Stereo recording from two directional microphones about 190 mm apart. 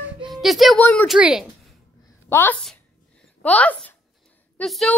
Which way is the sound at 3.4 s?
5° left (ahead or behind).